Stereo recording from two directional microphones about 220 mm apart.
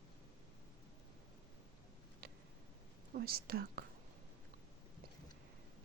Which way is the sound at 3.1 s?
45° right (ahead or behind).